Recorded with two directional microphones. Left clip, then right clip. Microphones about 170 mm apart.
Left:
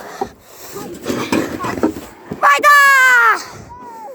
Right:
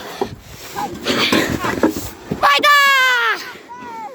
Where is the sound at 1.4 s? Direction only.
30° left (ahead or behind).